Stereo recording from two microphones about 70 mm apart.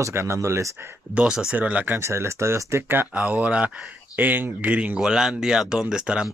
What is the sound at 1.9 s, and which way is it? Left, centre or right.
Speech, right.